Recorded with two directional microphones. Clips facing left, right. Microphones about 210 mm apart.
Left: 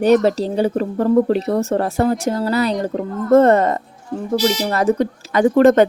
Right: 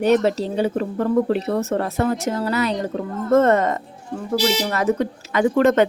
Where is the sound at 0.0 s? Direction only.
40° left (ahead or behind).